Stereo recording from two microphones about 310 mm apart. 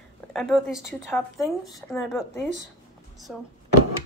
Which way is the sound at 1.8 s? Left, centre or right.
Centre.